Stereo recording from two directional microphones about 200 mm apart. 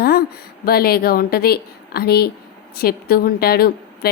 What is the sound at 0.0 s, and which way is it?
A woman's voice, 50° left (ahead or behind).